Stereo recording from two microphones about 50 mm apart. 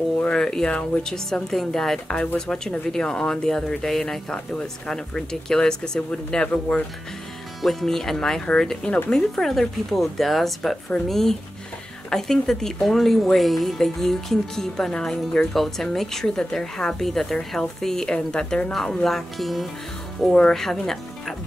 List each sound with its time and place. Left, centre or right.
0.2 s speech: centre
0.7 s speech: left
1.0 s speech: centre
2.0 s speech: centre
7.6 s speech: centre
18.7 s speech: centre
20.3 s speech: centre